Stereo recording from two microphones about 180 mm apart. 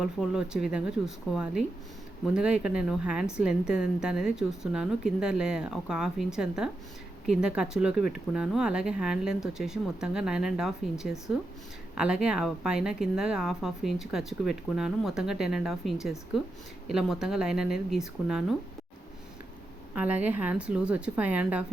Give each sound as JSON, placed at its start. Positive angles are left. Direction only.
{"t": 0.0, "sound": "speech", "side_deg": -5}
{"t": 19.9, "sound": "a woman's voice", "side_deg": -10}